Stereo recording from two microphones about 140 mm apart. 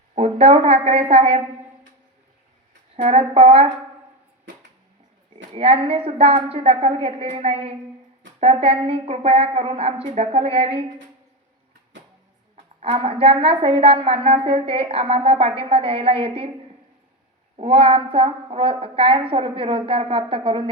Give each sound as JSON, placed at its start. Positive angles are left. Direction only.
{"t": 0.1, "sound": "a woman's voice", "side_deg": -45}
{"t": 2.9, "sound": "a woman's voice", "side_deg": -45}
{"t": 5.5, "sound": "a woman's voice", "side_deg": -45}
{"t": 12.8, "sound": "a woman's voice", "side_deg": -40}
{"t": 17.6, "sound": "a woman's voice", "side_deg": -40}